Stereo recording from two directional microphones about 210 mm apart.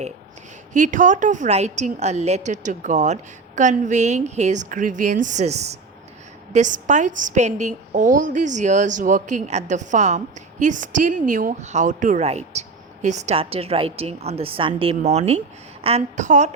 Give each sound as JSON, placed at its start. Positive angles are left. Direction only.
{"t": 0.7, "sound": "a woman's voice", "side_deg": -40}